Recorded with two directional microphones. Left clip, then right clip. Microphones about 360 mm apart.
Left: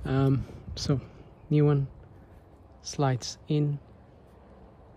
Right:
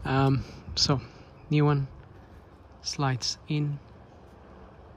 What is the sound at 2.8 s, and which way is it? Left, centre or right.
Speech, centre.